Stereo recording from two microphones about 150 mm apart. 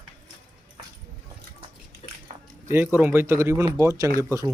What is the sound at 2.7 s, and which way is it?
Speech, 10° right (ahead or behind).